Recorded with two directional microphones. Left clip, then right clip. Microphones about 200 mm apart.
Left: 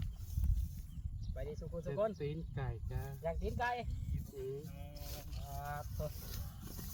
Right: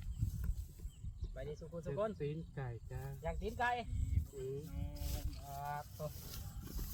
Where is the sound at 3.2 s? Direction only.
25° right (ahead or behind).